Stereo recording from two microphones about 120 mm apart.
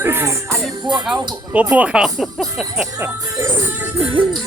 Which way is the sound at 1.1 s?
35° right (ahead or behind).